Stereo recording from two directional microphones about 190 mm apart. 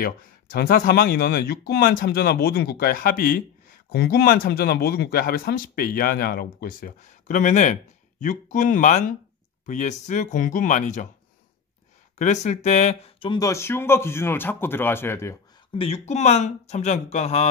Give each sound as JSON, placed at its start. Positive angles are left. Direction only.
{"t": 0.0, "sound": "speech", "side_deg": 50}
{"t": 12.2, "sound": "speech", "side_deg": 40}
{"t": 15.7, "sound": "speech", "side_deg": 30}